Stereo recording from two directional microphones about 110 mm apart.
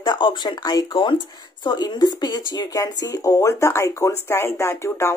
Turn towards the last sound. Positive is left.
turn(degrees=25)  # may be behind; listen again after turning